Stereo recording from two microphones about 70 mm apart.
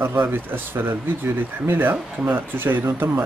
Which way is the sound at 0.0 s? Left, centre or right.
Right.